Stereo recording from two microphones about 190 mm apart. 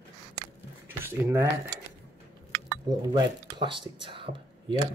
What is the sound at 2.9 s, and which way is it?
Speech, 20° right (ahead or behind).